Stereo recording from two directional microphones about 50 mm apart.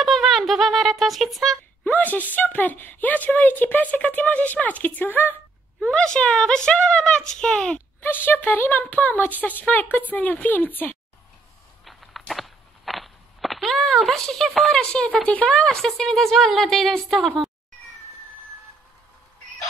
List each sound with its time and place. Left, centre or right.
0.0 s speech: centre
1.9 s speech: left
5.9 s speech: centre
8.0 s speech: left
11.8 s walk: centre
14.2 s speech: centre
14.8 s speech: centre